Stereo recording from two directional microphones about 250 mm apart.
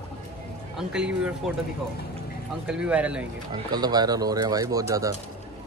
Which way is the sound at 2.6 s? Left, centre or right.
Centre.